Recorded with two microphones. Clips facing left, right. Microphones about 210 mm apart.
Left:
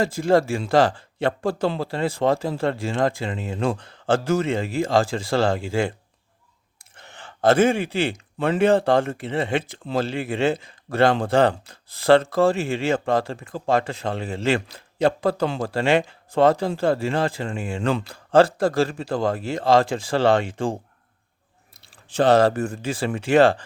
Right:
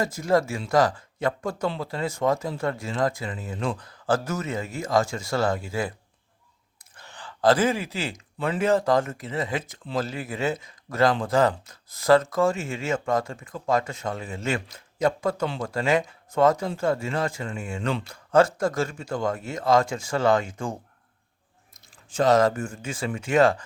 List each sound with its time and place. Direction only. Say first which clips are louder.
0.0 s speech: left 4 dB; 30° left (ahead or behind)
6.9 s speech: even; 20° left (ahead or behind)